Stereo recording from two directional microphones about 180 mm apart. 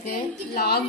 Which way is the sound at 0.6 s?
60° left (ahead or behind).